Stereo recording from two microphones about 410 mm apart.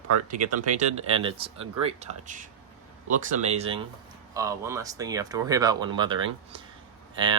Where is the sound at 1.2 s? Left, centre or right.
Centre.